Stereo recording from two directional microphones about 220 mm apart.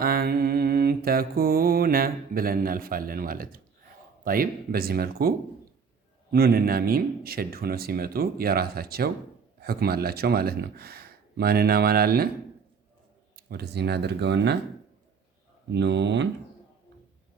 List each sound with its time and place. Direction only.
0.0 s mantra: 45° right (ahead or behind)
4.2 s speech: 40° right (ahead or behind)
6.3 s speech: 45° right (ahead or behind)
13.3 s speech: 45° right (ahead or behind)
15.7 s speech: 50° right (ahead or behind)